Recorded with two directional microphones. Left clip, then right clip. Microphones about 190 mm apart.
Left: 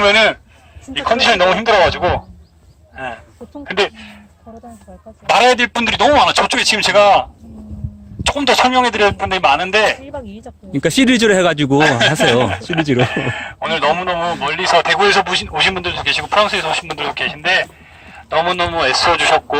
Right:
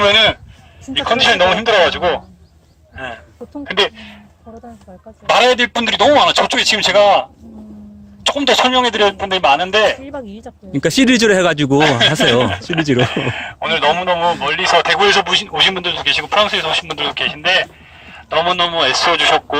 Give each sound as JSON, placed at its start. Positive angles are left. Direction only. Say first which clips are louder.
{"t": 0.0, "sound": "speech", "louder": "even", "side_deg": 0}
{"t": 5.2, "sound": "speech", "louder": "even", "side_deg": 15}
{"t": 10.0, "sound": "speech", "louder": "right 1 dB", "side_deg": -40}
{"t": 10.7, "sound": "speech", "louder": "even", "side_deg": 0}